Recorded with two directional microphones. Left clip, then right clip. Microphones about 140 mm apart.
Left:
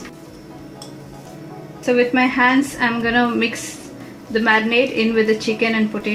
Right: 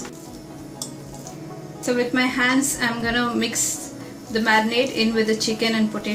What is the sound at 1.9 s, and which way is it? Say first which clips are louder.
A woman's voice: left 5 dB; 45° left (ahead or behind).